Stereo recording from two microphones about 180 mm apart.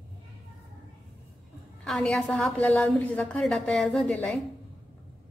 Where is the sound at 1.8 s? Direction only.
5° left (ahead or behind).